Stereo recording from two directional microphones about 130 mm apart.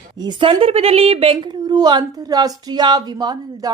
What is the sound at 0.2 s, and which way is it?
A woman's voice, 35° right (ahead or behind).